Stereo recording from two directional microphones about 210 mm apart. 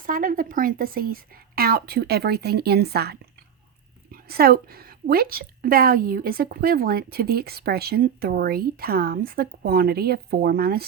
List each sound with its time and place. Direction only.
0.0 s a woman's voice: 40° right (ahead or behind)